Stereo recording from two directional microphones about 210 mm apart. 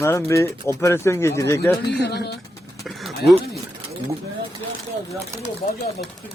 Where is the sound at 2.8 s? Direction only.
Centre (ahead or behind).